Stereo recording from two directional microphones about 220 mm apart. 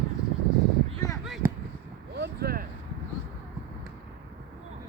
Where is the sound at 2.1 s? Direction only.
50° right (ahead or behind).